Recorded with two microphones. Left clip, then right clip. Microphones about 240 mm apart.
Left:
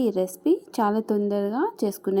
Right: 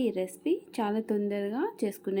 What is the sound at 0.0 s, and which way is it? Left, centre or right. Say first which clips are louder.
A woman's voice: left 6 dB; left.